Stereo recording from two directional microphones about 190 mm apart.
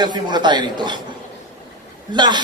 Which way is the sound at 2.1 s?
25° right (ahead or behind).